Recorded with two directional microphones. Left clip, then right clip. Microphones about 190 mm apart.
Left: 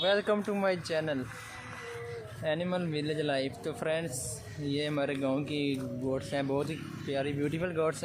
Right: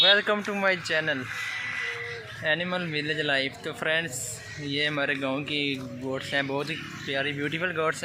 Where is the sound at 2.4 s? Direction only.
Centre (ahead or behind).